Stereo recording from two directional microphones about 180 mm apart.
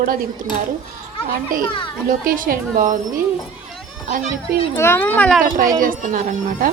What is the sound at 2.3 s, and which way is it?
Speech, 50° right (ahead or behind).